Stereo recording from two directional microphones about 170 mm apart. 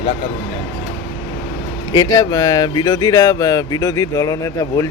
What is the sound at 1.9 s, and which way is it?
Speech, 25° left (ahead or behind).